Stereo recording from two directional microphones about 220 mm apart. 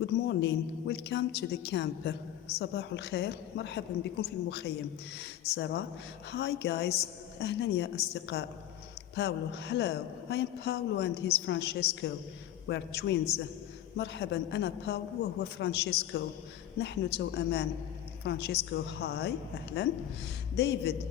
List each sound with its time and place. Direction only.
0.0 s a woman's voice: 50° left (ahead or behind)